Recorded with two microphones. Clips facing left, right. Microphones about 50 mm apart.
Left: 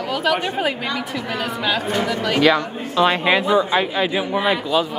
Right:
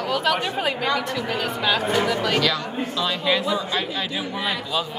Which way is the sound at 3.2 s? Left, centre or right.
Left.